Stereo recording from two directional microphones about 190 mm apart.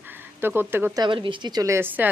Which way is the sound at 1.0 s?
25° right (ahead or behind).